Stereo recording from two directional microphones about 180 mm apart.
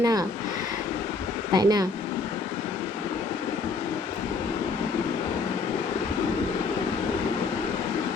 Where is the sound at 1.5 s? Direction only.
20° right (ahead or behind).